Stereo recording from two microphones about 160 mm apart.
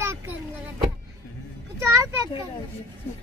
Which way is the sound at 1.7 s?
15° right (ahead or behind).